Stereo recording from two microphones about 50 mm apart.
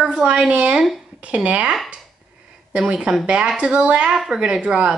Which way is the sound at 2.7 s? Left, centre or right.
Centre.